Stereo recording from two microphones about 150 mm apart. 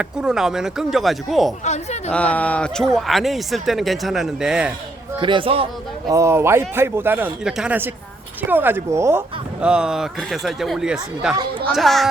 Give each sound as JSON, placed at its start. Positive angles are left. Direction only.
{"t": 0.0, "sound": "speech", "side_deg": -5}
{"t": 1.6, "sound": "speech", "side_deg": 50}
{"t": 2.1, "sound": "speech", "side_deg": 10}
{"t": 5.2, "sound": "speech", "side_deg": -35}
{"t": 6.1, "sound": "speech", "side_deg": -20}
{"t": 9.6, "sound": "speech", "side_deg": -5}